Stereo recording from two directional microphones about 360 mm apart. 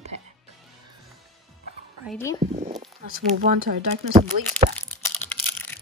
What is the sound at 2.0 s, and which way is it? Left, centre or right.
Speech, centre.